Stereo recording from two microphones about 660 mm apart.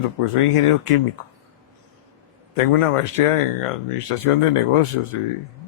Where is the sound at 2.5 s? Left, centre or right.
Left.